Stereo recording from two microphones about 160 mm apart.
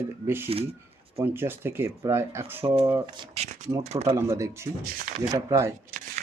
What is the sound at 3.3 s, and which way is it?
Speech, 45° right (ahead or behind).